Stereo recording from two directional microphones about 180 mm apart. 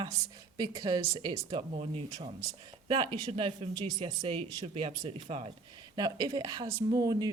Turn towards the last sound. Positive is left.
turn(degrees=-20)  # may be behind; listen again after turning